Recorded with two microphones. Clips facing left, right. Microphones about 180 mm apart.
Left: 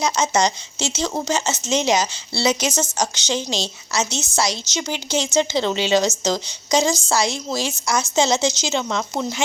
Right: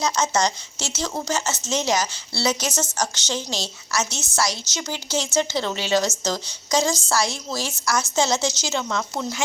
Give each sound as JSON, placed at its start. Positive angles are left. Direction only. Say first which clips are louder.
{"t": 0.0, "sound": "a woman's voice", "louder": "left 2 dB", "side_deg": 15}